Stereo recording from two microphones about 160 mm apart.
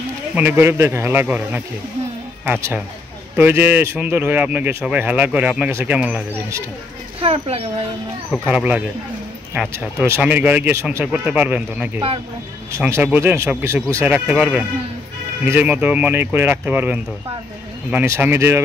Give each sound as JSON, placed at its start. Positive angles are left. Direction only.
{"t": 0.4, "sound": "speech", "side_deg": -10}
{"t": 7.2, "sound": "speech", "side_deg": -40}
{"t": 8.3, "sound": "speech", "side_deg": -5}